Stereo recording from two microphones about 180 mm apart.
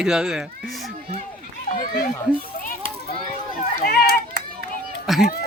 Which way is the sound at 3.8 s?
60° left (ahead or behind).